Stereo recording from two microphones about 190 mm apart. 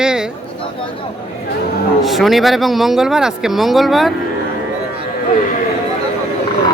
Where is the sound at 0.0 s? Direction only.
5° right (ahead or behind).